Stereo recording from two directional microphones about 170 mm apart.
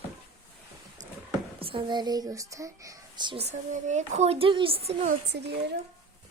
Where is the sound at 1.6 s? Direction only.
30° right (ahead or behind).